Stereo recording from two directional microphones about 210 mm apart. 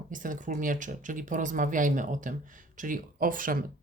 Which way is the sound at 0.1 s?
40° right (ahead or behind).